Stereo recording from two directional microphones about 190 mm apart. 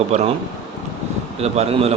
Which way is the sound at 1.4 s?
35° right (ahead or behind).